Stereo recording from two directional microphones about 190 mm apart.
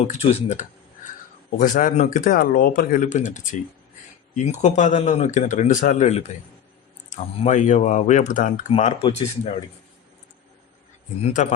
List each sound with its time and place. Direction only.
0.0 s speech: 35° left (ahead or behind)
8.7 s speech: 30° left (ahead or behind)